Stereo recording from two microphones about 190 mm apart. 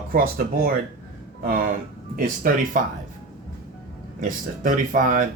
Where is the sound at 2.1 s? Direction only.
45° right (ahead or behind).